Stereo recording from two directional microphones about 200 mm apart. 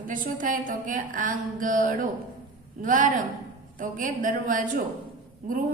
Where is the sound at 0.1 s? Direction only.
40° right (ahead or behind).